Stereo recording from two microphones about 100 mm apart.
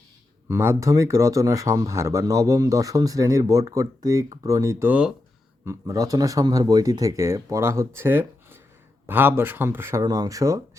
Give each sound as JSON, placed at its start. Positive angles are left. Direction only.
{"t": 0.4, "sound": "speech", "side_deg": -25}
{"t": 4.9, "sound": "speech", "side_deg": -10}
{"t": 5.6, "sound": "speech", "side_deg": -35}
{"t": 10.0, "sound": "speech", "side_deg": -40}